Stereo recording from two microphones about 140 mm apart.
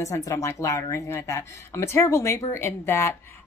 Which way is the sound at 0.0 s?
25° left (ahead or behind).